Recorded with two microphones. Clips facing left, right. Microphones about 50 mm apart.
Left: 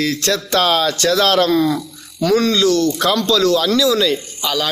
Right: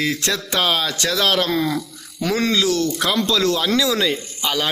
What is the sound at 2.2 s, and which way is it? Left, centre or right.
Speech, right.